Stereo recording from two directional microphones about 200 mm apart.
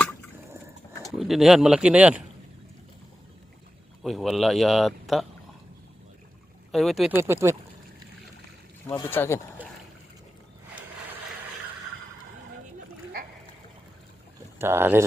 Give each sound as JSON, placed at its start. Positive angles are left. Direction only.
{"t": 1.0, "sound": "speech", "side_deg": 0}
{"t": 4.0, "sound": "speech", "side_deg": 0}
{"t": 6.7, "sound": "speech", "side_deg": 0}
{"t": 7.3, "sound": "speech", "side_deg": -15}
{"t": 8.9, "sound": "speech", "side_deg": 10}
{"t": 14.6, "sound": "speech", "side_deg": -10}